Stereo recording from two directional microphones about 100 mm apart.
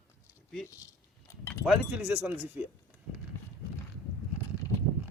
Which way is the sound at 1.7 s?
15° right (ahead or behind).